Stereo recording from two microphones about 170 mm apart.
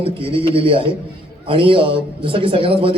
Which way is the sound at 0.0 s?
35° right (ahead or behind).